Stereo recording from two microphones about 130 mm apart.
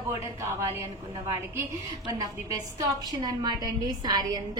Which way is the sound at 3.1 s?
35° right (ahead or behind).